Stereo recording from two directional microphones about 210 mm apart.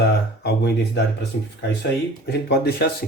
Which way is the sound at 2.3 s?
50° left (ahead or behind).